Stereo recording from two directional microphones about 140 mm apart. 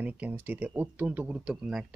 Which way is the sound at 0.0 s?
10° right (ahead or behind).